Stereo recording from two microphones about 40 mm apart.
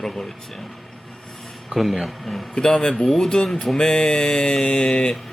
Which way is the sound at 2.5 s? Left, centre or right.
Centre.